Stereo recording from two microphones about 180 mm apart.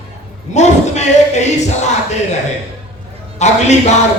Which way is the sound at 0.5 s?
40° left (ahead or behind).